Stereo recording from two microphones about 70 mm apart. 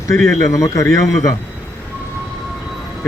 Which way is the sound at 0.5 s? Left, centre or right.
Left.